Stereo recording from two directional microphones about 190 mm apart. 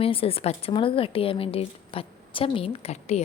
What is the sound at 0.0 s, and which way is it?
A woman's voice, 30° left (ahead or behind).